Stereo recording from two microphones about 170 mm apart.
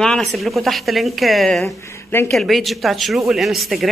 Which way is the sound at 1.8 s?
15° left (ahead or behind).